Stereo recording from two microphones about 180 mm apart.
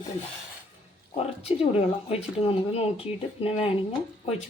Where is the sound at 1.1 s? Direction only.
35° left (ahead or behind).